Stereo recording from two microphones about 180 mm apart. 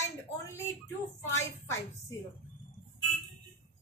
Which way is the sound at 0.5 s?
15° left (ahead or behind).